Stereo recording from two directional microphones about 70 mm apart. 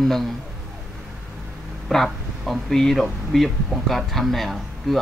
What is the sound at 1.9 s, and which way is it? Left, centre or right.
Speech, centre.